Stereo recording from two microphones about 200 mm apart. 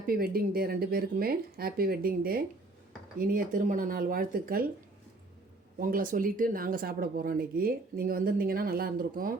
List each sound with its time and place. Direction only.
0.0 s speech: 45° right (ahead or behind)
5.8 s speech: 45° right (ahead or behind)